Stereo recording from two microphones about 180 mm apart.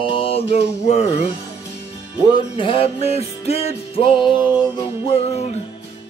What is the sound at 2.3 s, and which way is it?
Music, 30° left (ahead or behind).